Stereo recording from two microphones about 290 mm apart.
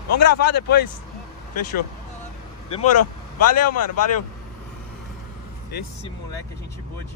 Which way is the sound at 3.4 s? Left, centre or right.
Left.